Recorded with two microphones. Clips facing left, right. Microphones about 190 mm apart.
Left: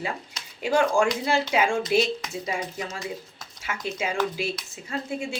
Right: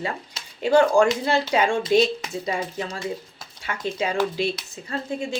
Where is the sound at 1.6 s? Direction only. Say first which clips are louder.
Right 3 dB; 30° right (ahead or behind).